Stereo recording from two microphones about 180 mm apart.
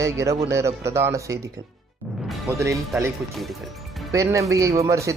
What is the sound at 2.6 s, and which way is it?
Speech, 15° right (ahead or behind).